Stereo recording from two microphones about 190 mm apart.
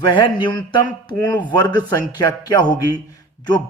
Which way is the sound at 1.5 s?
20° left (ahead or behind).